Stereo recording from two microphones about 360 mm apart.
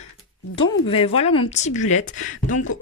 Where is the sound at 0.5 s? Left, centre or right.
Centre.